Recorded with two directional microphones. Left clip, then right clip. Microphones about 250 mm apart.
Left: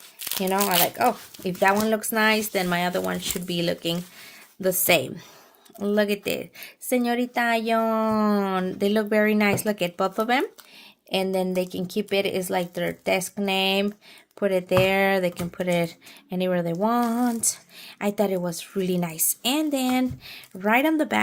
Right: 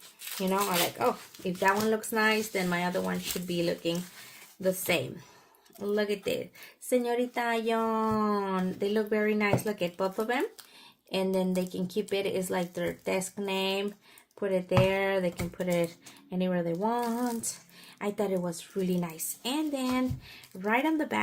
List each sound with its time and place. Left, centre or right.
0.4 s speech: left